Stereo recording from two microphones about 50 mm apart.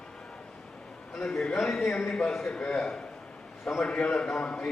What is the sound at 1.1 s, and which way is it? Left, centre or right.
A man's voice, centre.